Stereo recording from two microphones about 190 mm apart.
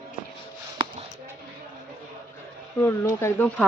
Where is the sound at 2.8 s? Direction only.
15° left (ahead or behind).